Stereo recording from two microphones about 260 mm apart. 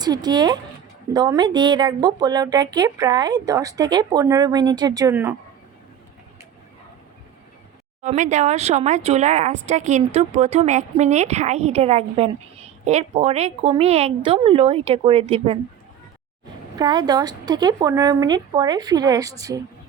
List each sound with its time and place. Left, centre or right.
0.0 s speech: centre
8.0 s speech: right
16.7 s speech: centre